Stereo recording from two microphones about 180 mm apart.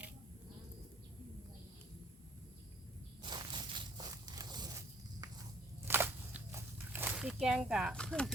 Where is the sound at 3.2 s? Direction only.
25° right (ahead or behind).